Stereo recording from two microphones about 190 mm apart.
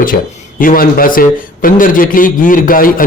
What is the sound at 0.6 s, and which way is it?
A man's voice, 45° left (ahead or behind).